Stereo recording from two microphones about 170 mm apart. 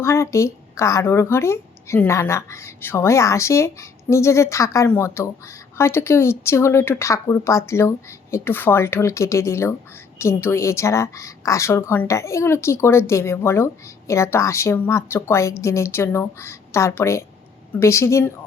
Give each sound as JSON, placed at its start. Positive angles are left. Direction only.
{"t": 0.0, "sound": "a woman's voice", "side_deg": 15}